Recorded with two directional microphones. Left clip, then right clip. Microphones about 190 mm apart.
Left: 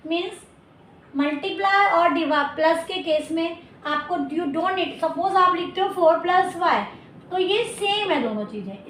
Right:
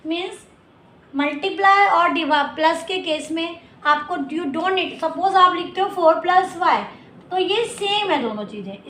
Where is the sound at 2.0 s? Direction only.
30° right (ahead or behind).